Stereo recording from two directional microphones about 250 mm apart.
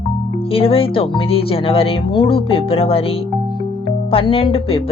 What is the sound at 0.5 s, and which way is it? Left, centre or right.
Speech, left.